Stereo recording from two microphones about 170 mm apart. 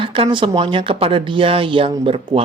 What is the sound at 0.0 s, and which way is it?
A man's voice, 30° right (ahead or behind).